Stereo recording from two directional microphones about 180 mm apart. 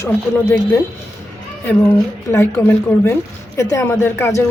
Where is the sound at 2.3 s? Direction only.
15° left (ahead or behind).